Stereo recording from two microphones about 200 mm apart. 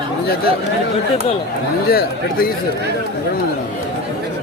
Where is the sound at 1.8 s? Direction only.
50° left (ahead or behind).